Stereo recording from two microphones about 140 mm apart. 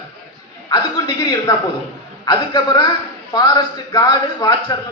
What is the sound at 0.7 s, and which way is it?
A man's voice, 25° left (ahead or behind).